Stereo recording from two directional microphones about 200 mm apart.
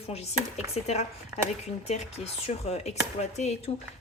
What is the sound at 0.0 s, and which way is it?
Speech, 30° left (ahead or behind).